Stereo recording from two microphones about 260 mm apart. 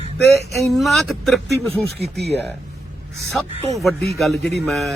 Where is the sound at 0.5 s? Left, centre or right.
Centre.